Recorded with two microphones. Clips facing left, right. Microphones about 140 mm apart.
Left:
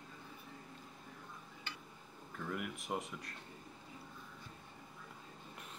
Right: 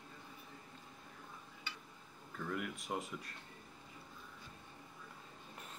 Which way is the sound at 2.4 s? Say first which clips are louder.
Right 1 dB; 5° left (ahead or behind).